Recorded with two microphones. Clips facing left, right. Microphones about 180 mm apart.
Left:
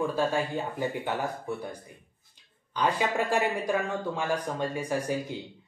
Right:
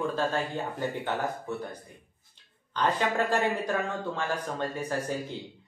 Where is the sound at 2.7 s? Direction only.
10° left (ahead or behind).